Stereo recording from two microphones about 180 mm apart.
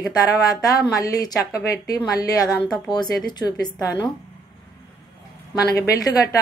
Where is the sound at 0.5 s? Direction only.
20° left (ahead or behind).